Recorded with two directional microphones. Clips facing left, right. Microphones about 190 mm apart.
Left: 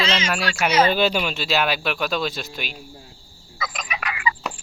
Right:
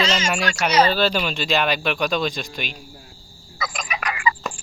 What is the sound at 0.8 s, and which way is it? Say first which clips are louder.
Speech: even; 15° left (ahead or behind).